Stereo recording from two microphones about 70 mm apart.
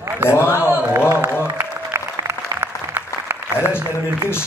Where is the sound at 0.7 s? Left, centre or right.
Right.